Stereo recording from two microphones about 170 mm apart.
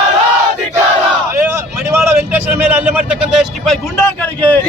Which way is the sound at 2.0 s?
15° right (ahead or behind).